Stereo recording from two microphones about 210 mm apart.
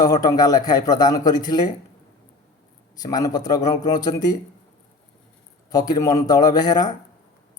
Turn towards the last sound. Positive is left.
turn(degrees=20)  # may be behind; listen again after turning